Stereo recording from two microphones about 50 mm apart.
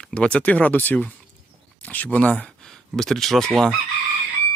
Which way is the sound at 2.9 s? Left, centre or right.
Centre.